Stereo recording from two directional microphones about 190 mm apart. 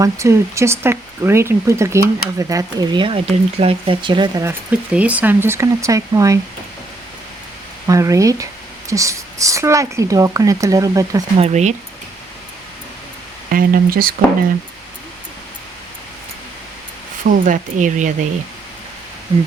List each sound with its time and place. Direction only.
0.0 s speech: 15° right (ahead or behind)
4.9 s speech: 5° right (ahead or behind)
7.9 s speech: 15° right (ahead or behind)
11.3 s speech: 35° right (ahead or behind)
13.5 s speech: 50° right (ahead or behind)
17.2 s speech: 40° right (ahead or behind)